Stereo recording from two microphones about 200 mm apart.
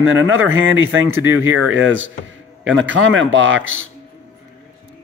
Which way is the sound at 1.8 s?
75° right (ahead or behind).